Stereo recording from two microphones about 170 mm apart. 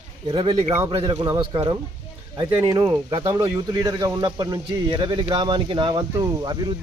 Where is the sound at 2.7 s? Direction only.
30° right (ahead or behind).